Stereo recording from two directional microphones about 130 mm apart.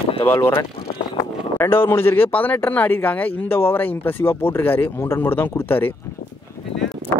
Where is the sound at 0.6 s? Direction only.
30° left (ahead or behind).